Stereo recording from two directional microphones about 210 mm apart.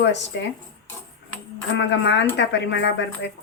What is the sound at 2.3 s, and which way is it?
Speech, 60° left (ahead or behind).